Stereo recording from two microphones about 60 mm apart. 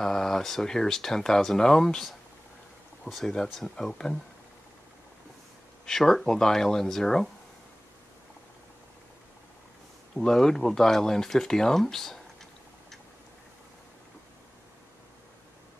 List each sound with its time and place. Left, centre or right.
0.0 s speech: centre
3.1 s speech: centre
3.5 s speech: centre
5.9 s speech: centre
10.1 s speech: centre